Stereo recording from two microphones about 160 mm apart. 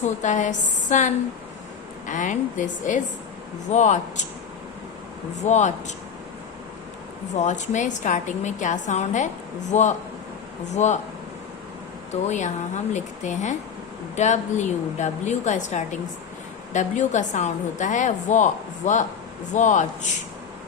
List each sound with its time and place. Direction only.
0.0 s a woman's voice: 50° left (ahead or behind)
5.5 s a woman's voice: 45° left (ahead or behind)
7.3 s a woman's voice: 50° left (ahead or behind)
12.3 s a woman's voice: 50° left (ahead or behind)